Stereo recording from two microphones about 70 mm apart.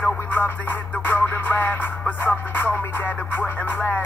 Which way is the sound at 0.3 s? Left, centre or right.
Left.